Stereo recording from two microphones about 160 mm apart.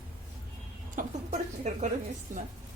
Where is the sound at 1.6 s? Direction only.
45° right (ahead or behind).